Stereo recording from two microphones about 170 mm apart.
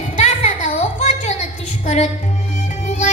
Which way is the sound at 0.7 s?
40° left (ahead or behind).